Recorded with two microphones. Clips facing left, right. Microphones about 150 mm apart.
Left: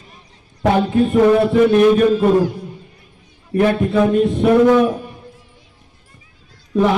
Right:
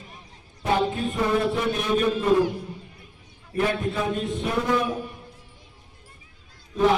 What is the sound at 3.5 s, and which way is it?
A man's voice, 65° left (ahead or behind).